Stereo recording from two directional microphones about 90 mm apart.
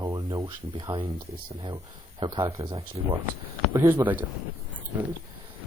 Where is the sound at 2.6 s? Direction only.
90° right.